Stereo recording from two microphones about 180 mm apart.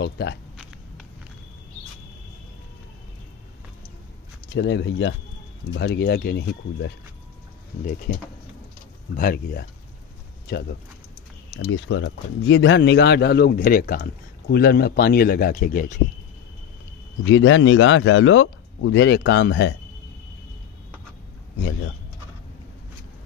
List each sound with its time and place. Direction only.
0.0 s speech: 70° left (ahead or behind)
4.6 s speech: 80° left
5.8 s speech: 70° left (ahead or behind)
8.1 s speech: 50° left (ahead or behind)
11.5 s speech: 90° left; by 15.9 s 50° left (ahead or behind)
17.3 s speech: 90° left